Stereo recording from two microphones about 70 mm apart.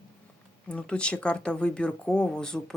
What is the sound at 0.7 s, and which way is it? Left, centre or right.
Speech, centre.